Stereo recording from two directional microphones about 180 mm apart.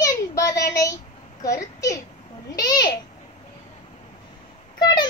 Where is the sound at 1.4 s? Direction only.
20° left (ahead or behind).